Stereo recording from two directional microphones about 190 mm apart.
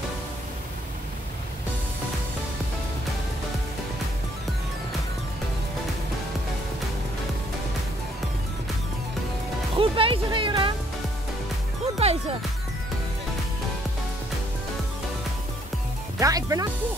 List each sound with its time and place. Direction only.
9.8 s music: 30° right (ahead or behind)
12.0 s music: 35° right (ahead or behind)
16.2 s music: 15° right (ahead or behind)